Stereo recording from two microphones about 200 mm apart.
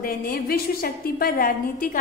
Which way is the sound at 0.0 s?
45° left (ahead or behind).